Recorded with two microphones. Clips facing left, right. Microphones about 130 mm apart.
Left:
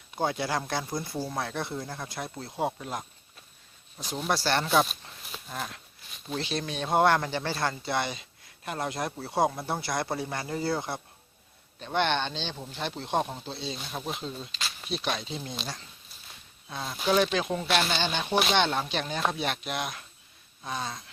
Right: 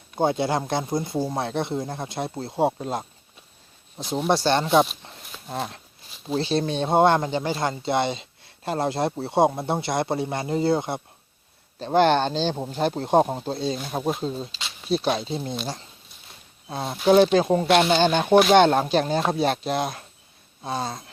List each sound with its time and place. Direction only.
0.2 s speech: 25° right (ahead or behind)
11.8 s speech: 35° right (ahead or behind)
16.6 s speech: 35° right (ahead or behind)
20.6 s a sound: 35° right (ahead or behind)